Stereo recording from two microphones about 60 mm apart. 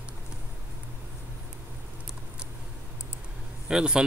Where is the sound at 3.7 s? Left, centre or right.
Centre.